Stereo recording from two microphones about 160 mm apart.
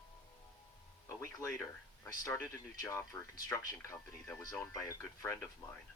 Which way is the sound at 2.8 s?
20° left (ahead or behind).